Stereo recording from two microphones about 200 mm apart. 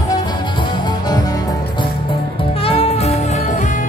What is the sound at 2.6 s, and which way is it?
Music, 30° left (ahead or behind).